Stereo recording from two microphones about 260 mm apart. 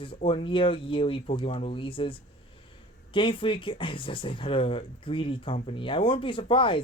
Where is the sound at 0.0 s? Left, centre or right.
Centre.